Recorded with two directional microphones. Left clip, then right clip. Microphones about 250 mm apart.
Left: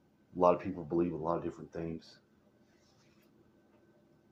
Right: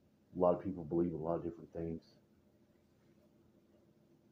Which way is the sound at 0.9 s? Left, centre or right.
Centre.